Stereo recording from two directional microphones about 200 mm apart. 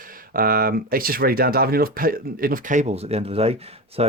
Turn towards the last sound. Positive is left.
turn(degrees=-30)  # may be behind; listen again after turning